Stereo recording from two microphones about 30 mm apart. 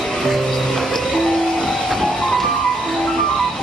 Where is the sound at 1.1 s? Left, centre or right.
Centre.